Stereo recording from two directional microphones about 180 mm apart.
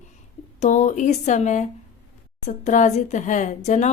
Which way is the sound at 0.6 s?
40° left (ahead or behind).